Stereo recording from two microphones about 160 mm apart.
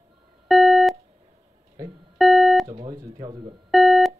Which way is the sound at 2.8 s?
25° right (ahead or behind).